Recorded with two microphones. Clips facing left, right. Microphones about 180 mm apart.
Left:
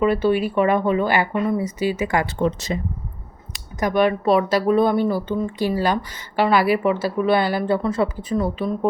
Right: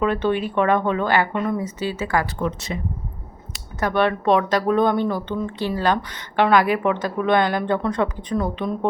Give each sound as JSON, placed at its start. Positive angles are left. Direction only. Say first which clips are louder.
{"t": 0.0, "sound": "speech", "louder": "left 3 dB", "side_deg": 10}
{"t": 2.7, "sound": "speech", "louder": "left 3 dB", "side_deg": 35}
{"t": 3.8, "sound": "speech", "louder": "left 2 dB", "side_deg": 10}